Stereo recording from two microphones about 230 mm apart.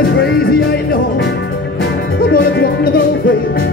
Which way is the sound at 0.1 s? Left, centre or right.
Left.